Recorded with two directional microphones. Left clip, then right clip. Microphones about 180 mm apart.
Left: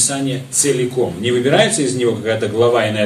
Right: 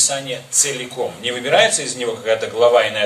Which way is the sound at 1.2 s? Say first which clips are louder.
Even; 30° right (ahead or behind).